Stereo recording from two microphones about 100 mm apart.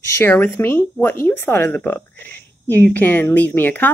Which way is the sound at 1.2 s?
20° left (ahead or behind).